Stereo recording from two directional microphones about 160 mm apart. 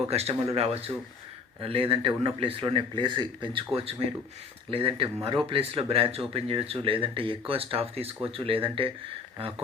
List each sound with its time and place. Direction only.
0.1 s speech: 40° right (ahead or behind)